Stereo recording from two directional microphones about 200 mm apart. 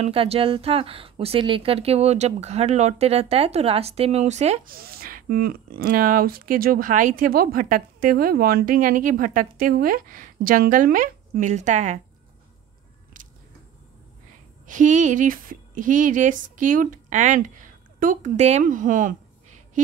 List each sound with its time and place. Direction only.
0.0 s speech: 30° right (ahead or behind)
4.7 s speech: 50° right (ahead or behind)
14.7 s speech: 40° right (ahead or behind)